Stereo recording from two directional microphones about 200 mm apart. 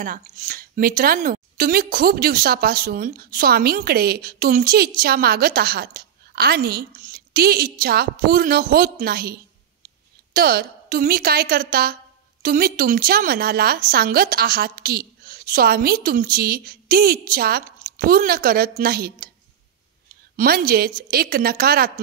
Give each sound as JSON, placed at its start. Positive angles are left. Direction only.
{"t": 0.0, "sound": "a woman's voice", "side_deg": -45}
{"t": 20.3, "sound": "a woman's voice", "side_deg": -50}